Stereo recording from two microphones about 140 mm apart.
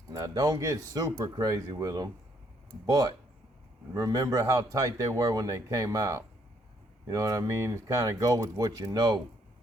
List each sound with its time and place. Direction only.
0.1 s speech: 25° right (ahead or behind)